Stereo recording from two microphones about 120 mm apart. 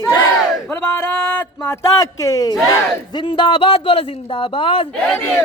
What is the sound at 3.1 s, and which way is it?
A man's voice, 40° left (ahead or behind).